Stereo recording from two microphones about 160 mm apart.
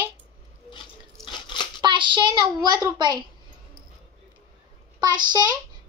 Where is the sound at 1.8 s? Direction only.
30° right (ahead or behind).